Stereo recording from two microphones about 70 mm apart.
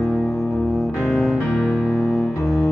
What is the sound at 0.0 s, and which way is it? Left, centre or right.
Music, centre.